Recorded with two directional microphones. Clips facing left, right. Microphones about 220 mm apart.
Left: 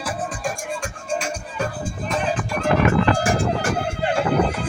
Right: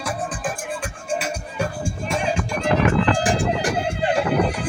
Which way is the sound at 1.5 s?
10° right (ahead or behind).